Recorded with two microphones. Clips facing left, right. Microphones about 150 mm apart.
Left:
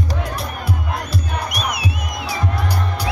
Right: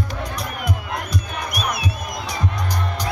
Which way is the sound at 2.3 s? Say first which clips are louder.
Left 3 dB; 10° left (ahead or behind).